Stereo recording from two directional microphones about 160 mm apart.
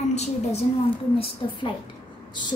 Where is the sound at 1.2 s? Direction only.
30° left (ahead or behind).